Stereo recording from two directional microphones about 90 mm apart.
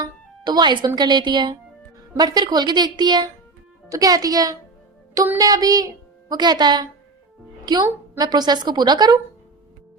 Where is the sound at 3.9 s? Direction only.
40° right (ahead or behind).